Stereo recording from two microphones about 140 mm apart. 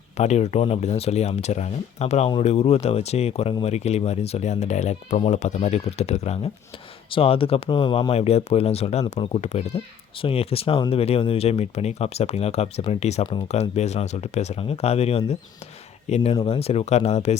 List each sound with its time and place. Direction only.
0.2 s speech: 55° left (ahead or behind)